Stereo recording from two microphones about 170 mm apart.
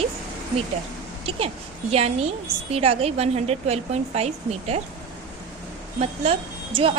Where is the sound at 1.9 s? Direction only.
40° right (ahead or behind).